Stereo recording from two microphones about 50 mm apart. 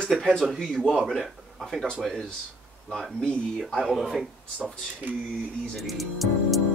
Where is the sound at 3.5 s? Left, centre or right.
Centre.